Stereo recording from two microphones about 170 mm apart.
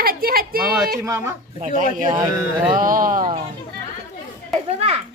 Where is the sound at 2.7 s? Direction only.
55° right (ahead or behind).